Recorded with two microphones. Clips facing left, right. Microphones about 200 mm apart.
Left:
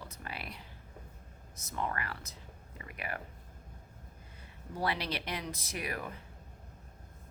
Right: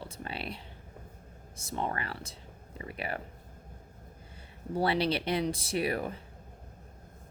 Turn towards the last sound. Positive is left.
turn(degrees=-30)  # may be behind; listen again after turning